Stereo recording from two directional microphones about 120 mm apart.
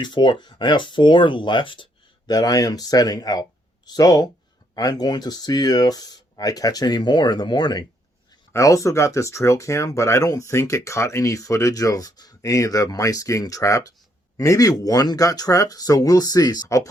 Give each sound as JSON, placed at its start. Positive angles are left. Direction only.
{"t": 0.0, "sound": "speech", "side_deg": 40}